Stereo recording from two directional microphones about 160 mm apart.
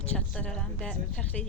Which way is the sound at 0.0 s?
10° left (ahead or behind).